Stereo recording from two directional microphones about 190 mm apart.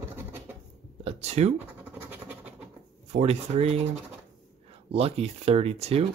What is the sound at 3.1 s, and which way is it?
Speech, 35° right (ahead or behind).